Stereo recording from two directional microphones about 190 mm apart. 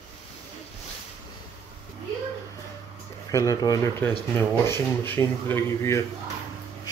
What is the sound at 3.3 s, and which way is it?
Speech, 15° left (ahead or behind).